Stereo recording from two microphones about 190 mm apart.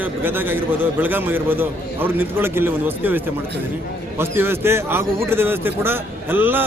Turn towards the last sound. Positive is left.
turn(degrees=-10)  # may be behind; listen again after turning